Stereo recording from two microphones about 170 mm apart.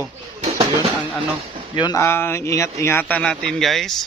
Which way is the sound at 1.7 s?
25° left (ahead or behind).